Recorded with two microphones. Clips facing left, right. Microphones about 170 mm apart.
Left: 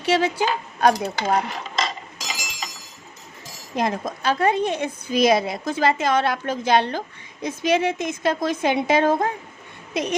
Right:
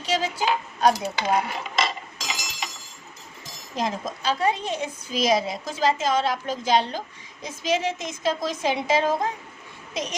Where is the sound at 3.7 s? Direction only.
55° left (ahead or behind).